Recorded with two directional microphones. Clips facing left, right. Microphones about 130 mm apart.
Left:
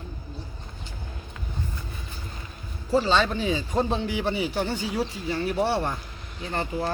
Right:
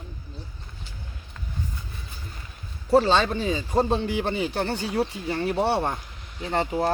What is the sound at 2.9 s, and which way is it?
Speech, 60° right (ahead or behind).